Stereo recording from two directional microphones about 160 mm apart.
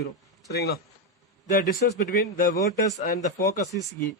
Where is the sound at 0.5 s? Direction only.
75° left (ahead or behind).